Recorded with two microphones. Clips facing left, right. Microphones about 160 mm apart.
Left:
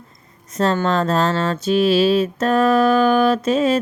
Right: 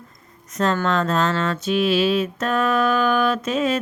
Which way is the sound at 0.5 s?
30° left (ahead or behind).